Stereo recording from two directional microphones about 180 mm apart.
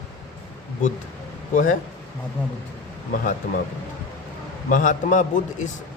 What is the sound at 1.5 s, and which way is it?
Speech, 45° left (ahead or behind).